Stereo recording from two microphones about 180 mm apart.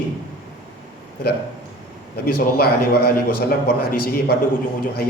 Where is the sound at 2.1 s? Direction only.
60° left (ahead or behind).